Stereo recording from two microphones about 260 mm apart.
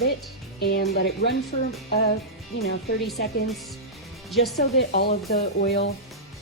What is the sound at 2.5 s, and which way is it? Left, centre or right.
Speech, left.